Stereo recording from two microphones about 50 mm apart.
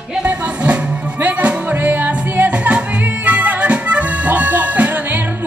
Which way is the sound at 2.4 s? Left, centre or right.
Right.